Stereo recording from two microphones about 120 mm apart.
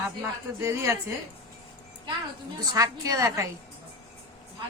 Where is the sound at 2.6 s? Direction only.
30° right (ahead or behind).